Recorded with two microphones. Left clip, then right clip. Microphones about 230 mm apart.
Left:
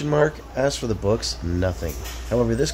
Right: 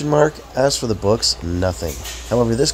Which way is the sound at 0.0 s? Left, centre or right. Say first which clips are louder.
Right 4 dB; centre.